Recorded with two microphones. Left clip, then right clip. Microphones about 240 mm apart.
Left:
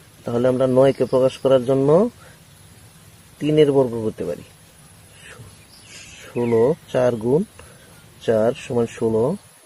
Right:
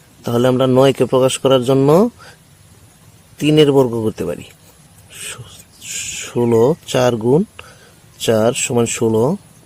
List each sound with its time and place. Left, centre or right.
0.3 s a man's voice: right
3.4 s a man's voice: right
6.3 s a man's voice: right